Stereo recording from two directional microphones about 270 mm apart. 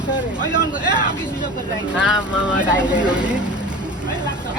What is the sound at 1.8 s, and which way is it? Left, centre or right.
Speech, centre.